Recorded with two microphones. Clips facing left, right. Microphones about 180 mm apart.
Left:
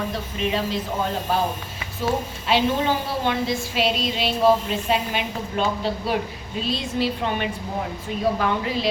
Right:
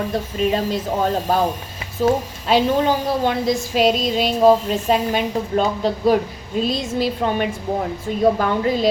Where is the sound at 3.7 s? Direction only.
45° right (ahead or behind).